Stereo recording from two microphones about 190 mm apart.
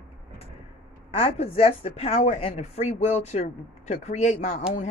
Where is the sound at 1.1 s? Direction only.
30° left (ahead or behind).